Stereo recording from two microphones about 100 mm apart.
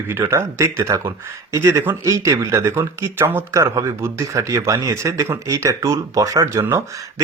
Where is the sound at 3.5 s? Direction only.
35° right (ahead or behind).